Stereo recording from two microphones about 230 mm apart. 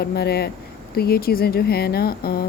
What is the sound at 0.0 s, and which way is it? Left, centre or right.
A woman's voice, left.